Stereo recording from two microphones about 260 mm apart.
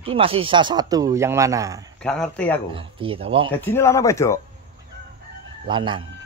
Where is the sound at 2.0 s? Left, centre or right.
Centre.